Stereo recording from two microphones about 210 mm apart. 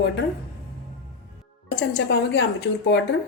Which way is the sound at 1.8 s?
55° left (ahead or behind).